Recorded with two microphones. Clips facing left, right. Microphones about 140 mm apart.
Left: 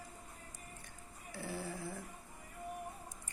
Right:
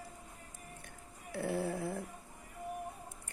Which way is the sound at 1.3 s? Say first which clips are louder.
Right 8 dB; 60° right (ahead or behind).